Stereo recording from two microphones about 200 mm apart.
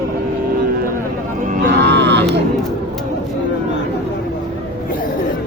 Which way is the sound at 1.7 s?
60° right (ahead or behind).